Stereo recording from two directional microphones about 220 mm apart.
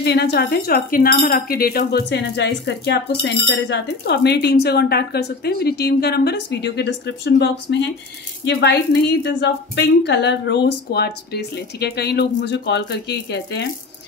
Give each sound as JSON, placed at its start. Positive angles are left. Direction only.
{"t": 0.0, "sound": "speech", "side_deg": 50}